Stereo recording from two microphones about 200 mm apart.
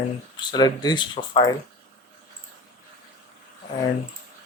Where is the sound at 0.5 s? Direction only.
20° left (ahead or behind).